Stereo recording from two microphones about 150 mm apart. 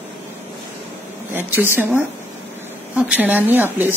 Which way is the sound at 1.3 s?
15° right (ahead or behind).